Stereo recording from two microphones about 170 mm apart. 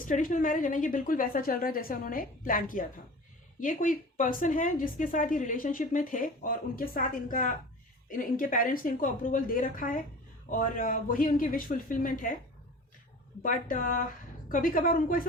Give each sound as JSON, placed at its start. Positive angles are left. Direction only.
{"t": 0.0, "sound": "speech", "side_deg": 55}
{"t": 13.4, "sound": "a woman's voice", "side_deg": 50}